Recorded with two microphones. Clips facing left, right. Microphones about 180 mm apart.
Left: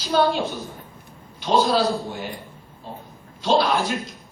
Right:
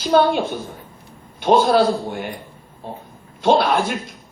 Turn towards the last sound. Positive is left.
turn(degrees=-55)  # may be behind; listen again after turning